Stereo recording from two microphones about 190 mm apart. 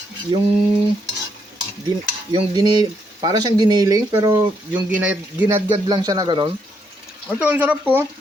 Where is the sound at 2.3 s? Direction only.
25° right (ahead or behind).